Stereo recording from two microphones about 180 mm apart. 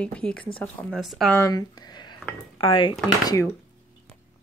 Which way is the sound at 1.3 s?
20° left (ahead or behind).